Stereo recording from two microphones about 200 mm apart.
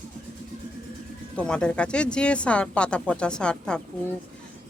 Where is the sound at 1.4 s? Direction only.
5° left (ahead or behind).